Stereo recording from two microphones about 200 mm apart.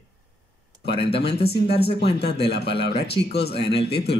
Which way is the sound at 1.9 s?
55° left (ahead or behind).